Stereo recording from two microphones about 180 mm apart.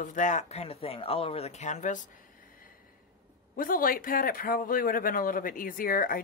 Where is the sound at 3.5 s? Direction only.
50° left (ahead or behind).